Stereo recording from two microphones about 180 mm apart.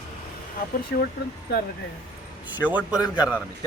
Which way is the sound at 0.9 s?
65° left (ahead or behind).